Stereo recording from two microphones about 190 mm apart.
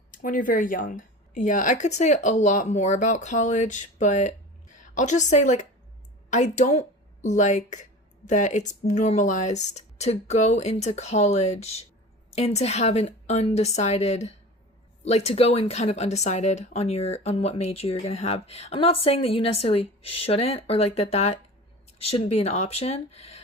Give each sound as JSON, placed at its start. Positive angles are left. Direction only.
{"t": 0.2, "sound": "a woman's voice", "side_deg": 45}